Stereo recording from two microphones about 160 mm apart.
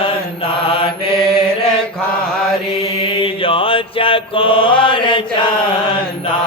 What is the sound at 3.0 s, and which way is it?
Mantra, 30° left (ahead or behind).